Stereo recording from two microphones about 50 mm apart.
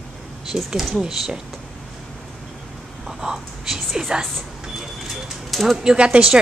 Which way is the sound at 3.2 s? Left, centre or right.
Centre.